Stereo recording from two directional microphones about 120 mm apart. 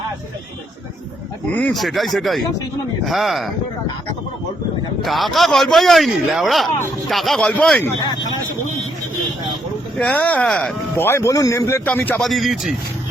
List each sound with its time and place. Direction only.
1.7 s a man's voice: centre (ahead or behind)
5.0 s a man's voice: centre (ahead or behind)
10.0 s a man's voice: 10° left (ahead or behind)
10.9 s a man's voice: 20° left (ahead or behind)
11.9 s speech: 15° left (ahead or behind)
12.2 s a man's voice: centre (ahead or behind)